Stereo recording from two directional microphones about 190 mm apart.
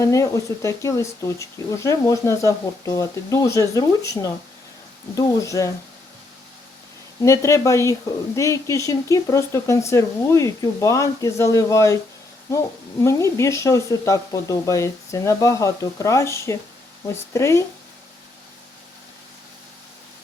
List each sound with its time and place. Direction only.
0.0 s speech: 15° left (ahead or behind)
7.2 s speech: 15° left (ahead or behind)
13.0 s speech: 15° left (ahead or behind)